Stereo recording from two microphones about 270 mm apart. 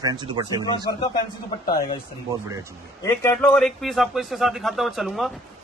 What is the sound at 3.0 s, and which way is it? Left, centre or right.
A man's voice, centre.